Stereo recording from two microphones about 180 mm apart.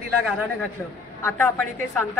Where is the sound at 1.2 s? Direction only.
15° left (ahead or behind).